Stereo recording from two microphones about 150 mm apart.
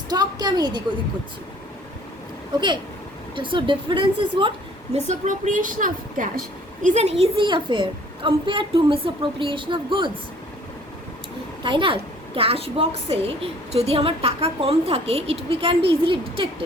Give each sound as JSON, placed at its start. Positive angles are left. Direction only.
{"t": 0.1, "sound": "a sound", "side_deg": -25}
{"t": 3.3, "sound": "a woman's voice", "side_deg": -35}
{"t": 4.9, "sound": "a woman's voice", "side_deg": -50}
{"t": 6.8, "sound": "a woman's voice", "side_deg": -45}
{"t": 11.6, "sound": "a woman's voice", "side_deg": -35}